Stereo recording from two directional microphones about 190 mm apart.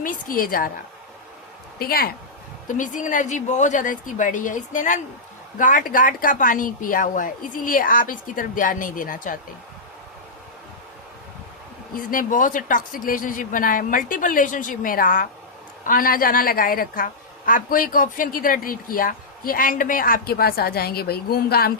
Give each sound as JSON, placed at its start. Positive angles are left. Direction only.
{"t": 0.0, "sound": "a woman's voice", "side_deg": 50}
{"t": 1.8, "sound": "a woman's voice", "side_deg": 50}
{"t": 2.6, "sound": "a woman's voice", "side_deg": 40}
{"t": 11.9, "sound": "a woman's voice", "side_deg": 45}